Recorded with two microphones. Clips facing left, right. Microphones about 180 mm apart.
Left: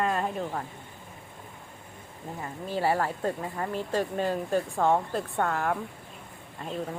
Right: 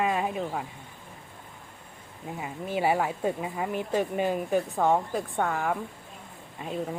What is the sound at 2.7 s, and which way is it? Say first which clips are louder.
Speech: right 1 dB; 15° right (ahead or behind).